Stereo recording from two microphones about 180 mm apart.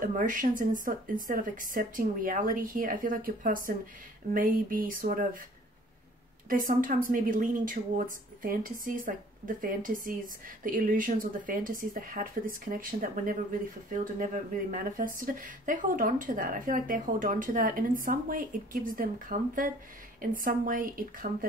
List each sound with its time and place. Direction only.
0.0 s a woman's voice: 50° right (ahead or behind)
6.5 s a woman's voice: 50° right (ahead or behind)